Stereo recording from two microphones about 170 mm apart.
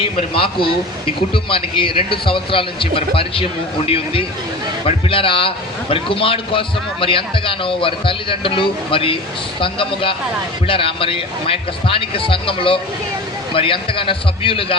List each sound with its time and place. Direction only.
0.2 s a man's voice: 30° left (ahead or behind)